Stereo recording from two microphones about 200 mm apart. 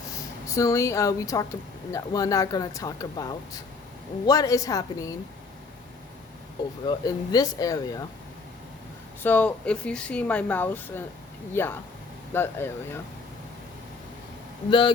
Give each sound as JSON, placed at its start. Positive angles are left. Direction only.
{"t": 0.4, "sound": "speech", "side_deg": 15}
{"t": 6.8, "sound": "speech", "side_deg": 20}
{"t": 9.2, "sound": "speech", "side_deg": 10}
{"t": 14.7, "sound": "speech", "side_deg": 25}